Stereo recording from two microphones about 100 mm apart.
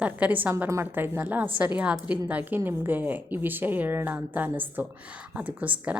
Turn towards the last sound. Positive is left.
turn(degrees=-15)  # may be behind; listen again after turning